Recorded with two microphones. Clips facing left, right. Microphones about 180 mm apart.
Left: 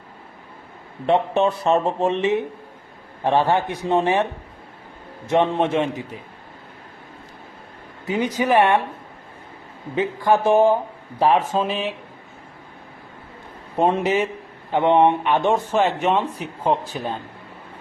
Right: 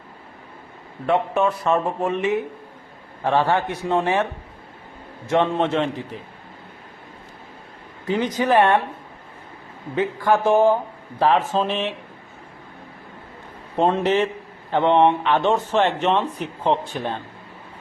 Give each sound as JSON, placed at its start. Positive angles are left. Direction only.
{"t": 1.0, "sound": "a man's voice", "side_deg": 25}
{"t": 5.3, "sound": "speech", "side_deg": 15}
{"t": 8.1, "sound": "speech", "side_deg": 10}
{"t": 9.9, "sound": "speech", "side_deg": 15}
{"t": 13.7, "sound": "a man's voice", "side_deg": 10}